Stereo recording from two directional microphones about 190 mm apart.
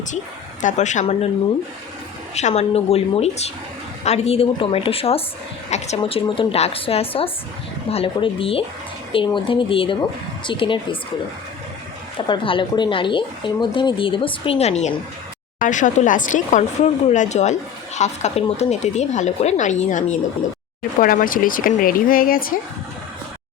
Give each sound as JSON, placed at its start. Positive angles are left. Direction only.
{"t": 0.6, "sound": "speech", "side_deg": 40}
{"t": 2.3, "sound": "a woman's voice", "side_deg": 35}
{"t": 12.1, "sound": "a woman's voice", "side_deg": 25}